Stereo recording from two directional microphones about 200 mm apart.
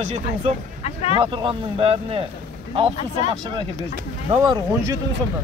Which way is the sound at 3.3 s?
25° right (ahead or behind).